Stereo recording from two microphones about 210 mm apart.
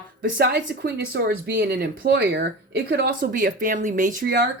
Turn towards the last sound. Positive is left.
turn(degrees=-45)  # may be behind; listen again after turning